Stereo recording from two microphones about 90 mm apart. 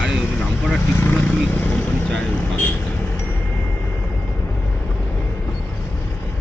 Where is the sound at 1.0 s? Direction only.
20° left (ahead or behind).